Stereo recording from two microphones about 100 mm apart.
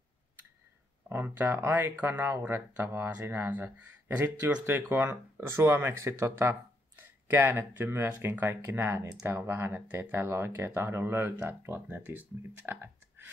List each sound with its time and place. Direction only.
1.0 s speech: 25° right (ahead or behind)
7.0 s speech: 20° right (ahead or behind)